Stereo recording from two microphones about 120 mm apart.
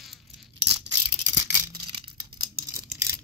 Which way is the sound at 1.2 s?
30° right (ahead or behind).